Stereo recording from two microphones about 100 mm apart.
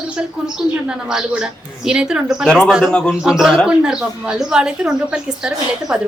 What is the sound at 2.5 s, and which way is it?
Speech, 5° left (ahead or behind).